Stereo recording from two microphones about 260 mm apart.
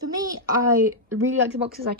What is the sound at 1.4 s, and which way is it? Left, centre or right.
Speech, right.